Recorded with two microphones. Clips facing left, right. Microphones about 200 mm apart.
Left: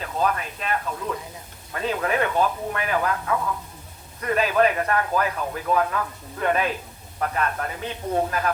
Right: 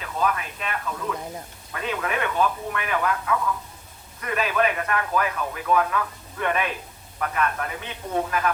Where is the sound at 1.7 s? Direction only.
35° left (ahead or behind).